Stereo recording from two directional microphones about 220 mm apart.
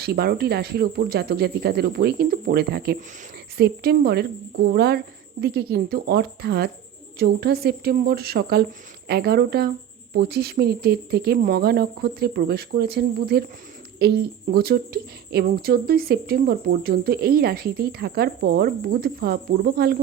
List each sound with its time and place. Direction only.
0.0 s a woman's voice: 45° right (ahead or behind)